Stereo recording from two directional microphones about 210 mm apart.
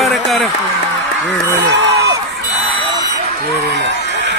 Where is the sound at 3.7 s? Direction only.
55° right (ahead or behind).